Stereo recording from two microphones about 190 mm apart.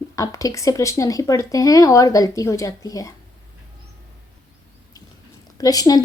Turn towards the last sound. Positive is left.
turn(degrees=20)  # may be behind; listen again after turning